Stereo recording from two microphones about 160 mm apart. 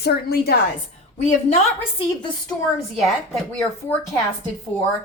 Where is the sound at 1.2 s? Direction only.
45° left (ahead or behind).